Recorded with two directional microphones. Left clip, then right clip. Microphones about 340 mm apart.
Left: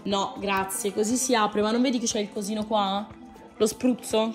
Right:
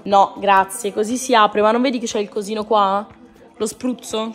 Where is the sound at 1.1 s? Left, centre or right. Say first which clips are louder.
Right 11 dB; right.